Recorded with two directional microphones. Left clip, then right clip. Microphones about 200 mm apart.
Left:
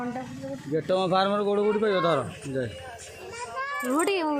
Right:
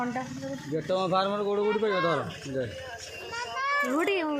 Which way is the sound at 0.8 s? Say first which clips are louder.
Left 3 dB; 50° left (ahead or behind).